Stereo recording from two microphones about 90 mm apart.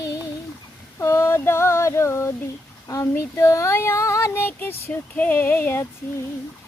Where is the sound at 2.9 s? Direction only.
35° left (ahead or behind).